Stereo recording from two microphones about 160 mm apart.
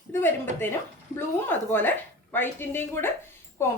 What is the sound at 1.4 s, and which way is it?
Speech, 10° left (ahead or behind).